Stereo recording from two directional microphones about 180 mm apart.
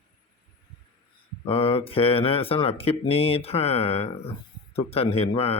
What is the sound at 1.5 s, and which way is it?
Speech, 30° left (ahead or behind).